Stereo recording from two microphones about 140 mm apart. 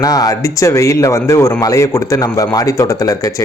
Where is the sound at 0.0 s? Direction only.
25° left (ahead or behind).